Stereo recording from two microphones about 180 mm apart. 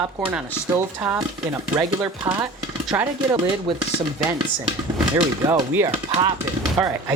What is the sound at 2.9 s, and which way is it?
Cutlery, 15° right (ahead or behind).